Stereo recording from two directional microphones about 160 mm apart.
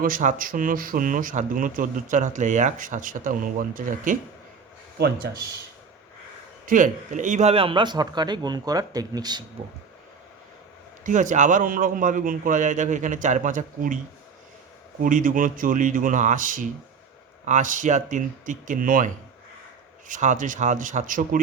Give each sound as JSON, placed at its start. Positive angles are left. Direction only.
{"t": 0.0, "sound": "speech", "side_deg": -55}
{"t": 4.9, "sound": "speech", "side_deg": -90}
{"t": 6.7, "sound": "a man's voice", "side_deg": -55}
{"t": 11.0, "sound": "a man's voice", "side_deg": -50}
{"t": 15.0, "sound": "a man's voice", "side_deg": -55}